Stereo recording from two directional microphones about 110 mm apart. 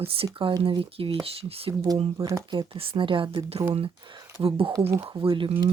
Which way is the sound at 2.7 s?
55° right (ahead or behind).